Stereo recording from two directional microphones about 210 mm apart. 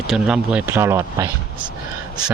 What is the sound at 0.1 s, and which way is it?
Speech, 5° right (ahead or behind).